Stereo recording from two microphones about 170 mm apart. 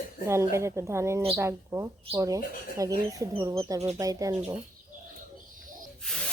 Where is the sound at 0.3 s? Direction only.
15° right (ahead or behind).